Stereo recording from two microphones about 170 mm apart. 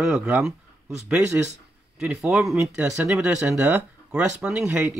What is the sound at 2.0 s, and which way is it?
Speech, 5° right (ahead or behind).